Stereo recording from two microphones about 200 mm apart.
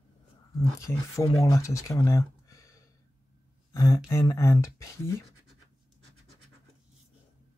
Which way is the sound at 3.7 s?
20° left (ahead or behind).